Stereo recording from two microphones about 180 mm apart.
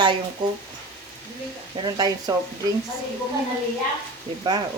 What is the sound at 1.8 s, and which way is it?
Speech, 20° right (ahead or behind).